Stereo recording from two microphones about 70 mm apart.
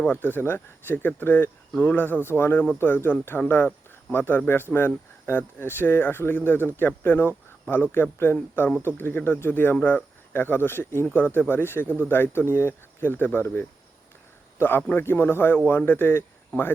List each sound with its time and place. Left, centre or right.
0.0 s speech: left